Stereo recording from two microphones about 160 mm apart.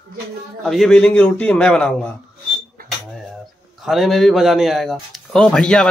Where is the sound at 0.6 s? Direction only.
Centre (ahead or behind).